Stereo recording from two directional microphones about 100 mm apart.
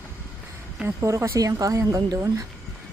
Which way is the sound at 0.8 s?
30° right (ahead or behind).